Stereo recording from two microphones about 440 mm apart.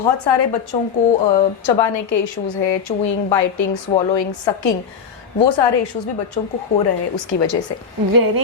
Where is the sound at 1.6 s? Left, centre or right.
Left.